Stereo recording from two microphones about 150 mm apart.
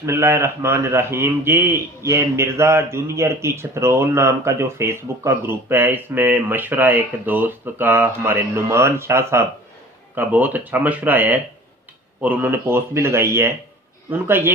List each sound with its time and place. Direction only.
0.0 s a man's voice: 15° right (ahead or behind)